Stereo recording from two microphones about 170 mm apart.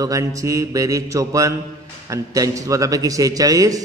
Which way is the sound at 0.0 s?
20° right (ahead or behind).